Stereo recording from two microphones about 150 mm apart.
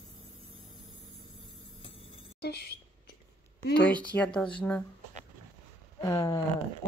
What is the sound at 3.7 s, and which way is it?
Speech, 10° left (ahead or behind).